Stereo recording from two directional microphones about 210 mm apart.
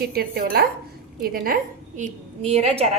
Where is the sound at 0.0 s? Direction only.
45° right (ahead or behind).